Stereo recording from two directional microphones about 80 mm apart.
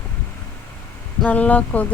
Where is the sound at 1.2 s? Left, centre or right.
Centre.